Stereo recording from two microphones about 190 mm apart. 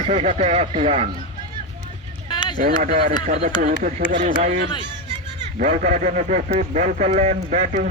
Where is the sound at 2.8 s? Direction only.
45° right (ahead or behind).